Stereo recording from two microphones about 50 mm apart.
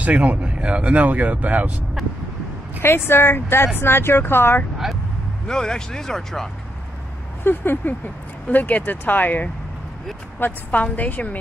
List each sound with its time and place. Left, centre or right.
0.0 s speech: right
2.0 s vehicle: centre
2.8 s speech: left
5.5 s speech: centre
7.4 s speech: left